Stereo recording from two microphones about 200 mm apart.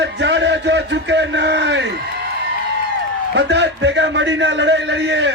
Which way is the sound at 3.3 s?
60° right (ahead or behind).